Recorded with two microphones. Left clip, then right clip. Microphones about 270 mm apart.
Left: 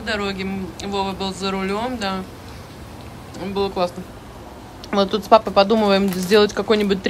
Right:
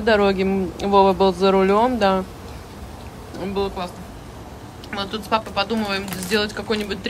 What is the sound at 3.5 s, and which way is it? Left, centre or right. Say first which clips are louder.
Speech: left 5 dB; centre.